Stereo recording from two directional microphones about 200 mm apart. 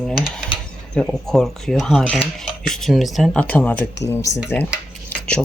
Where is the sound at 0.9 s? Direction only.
Centre (ahead or behind).